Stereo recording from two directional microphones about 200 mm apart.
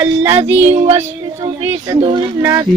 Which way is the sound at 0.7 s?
35° right (ahead or behind).